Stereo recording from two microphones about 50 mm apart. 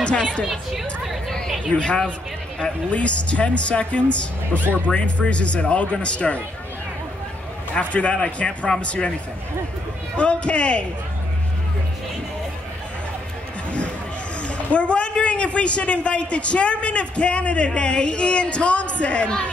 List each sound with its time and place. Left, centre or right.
0.0 s speech: left
1.8 s a man's voice: left
7.7 s a man's voice: left
10.1 s a man's voice: left
13.7 s a sound: left
14.4 s a man's voice: left